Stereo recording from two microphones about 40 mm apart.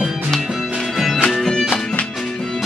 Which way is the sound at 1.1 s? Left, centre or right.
Centre.